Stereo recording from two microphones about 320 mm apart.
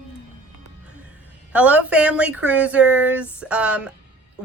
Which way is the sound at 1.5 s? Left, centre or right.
Centre.